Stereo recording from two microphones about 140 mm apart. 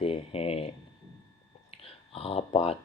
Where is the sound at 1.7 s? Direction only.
45° left (ahead or behind).